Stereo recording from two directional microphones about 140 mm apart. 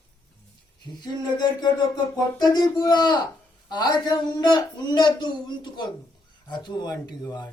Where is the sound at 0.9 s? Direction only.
30° left (ahead or behind).